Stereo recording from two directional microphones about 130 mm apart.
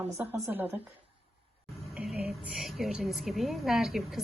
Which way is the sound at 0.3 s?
25° right (ahead or behind).